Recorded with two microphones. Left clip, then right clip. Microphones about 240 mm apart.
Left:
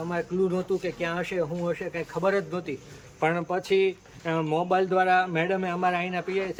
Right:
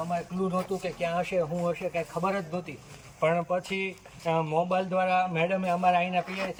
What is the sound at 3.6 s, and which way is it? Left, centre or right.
Speech, centre.